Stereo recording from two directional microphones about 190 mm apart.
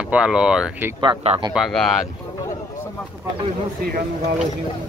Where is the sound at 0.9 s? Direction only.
30° right (ahead or behind).